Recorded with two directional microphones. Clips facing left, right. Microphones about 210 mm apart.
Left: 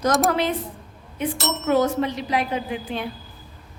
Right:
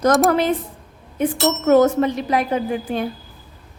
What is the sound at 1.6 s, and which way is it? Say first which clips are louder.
A woman's voice: right 6 dB; 45° right (ahead or behind).